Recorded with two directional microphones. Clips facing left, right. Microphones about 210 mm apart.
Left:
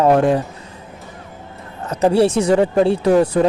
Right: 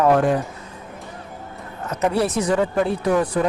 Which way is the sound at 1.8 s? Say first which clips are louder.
Left 6 dB; 30° left (ahead or behind).